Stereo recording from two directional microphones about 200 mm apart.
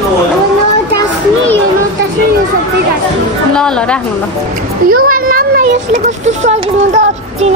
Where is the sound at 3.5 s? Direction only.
5° left (ahead or behind).